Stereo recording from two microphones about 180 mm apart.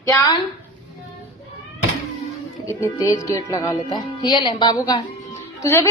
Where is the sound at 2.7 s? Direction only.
20° left (ahead or behind).